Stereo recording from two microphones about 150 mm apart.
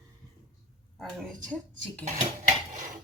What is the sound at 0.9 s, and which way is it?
Speech, 5° left (ahead or behind).